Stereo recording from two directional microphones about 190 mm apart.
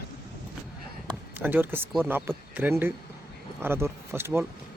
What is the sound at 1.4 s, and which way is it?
Speech, 10° right (ahead or behind).